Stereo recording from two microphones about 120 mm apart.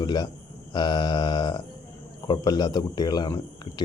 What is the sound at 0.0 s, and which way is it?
Speech, 35° left (ahead or behind).